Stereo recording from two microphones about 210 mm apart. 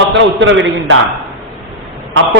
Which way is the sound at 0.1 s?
60° right (ahead or behind).